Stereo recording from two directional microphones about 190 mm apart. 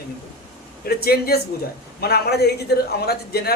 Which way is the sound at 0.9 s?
55° left (ahead or behind).